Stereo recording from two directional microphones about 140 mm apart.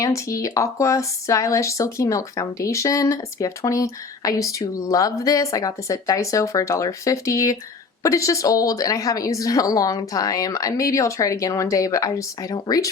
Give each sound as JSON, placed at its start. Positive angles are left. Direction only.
{"t": 0.0, "sound": "speech", "side_deg": 20}